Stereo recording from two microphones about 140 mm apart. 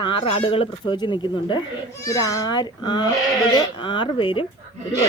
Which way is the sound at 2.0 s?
25° left (ahead or behind).